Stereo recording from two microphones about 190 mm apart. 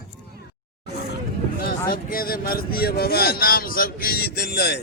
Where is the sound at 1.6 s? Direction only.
50° left (ahead or behind).